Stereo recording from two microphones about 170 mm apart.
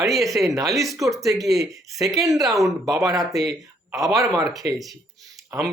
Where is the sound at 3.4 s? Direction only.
Centre (ahead or behind).